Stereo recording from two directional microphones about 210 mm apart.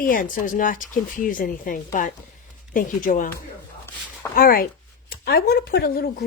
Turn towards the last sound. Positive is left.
turn(degrees=50)  # may be behind; listen again after turning